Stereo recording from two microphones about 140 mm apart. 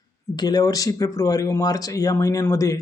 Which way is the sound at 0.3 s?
25° left (ahead or behind).